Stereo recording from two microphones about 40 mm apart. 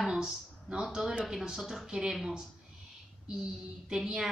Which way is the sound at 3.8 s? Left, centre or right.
Centre.